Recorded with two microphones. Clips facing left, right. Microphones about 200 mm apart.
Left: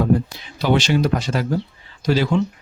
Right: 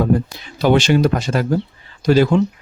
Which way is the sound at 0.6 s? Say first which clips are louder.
Right 4 dB; 50° right (ahead or behind).